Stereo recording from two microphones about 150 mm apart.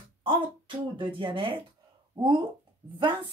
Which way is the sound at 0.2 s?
35° right (ahead or behind).